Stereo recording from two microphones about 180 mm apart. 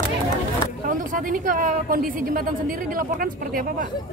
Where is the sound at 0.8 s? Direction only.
50° right (ahead or behind).